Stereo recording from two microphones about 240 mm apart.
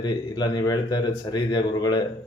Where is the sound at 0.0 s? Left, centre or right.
Centre.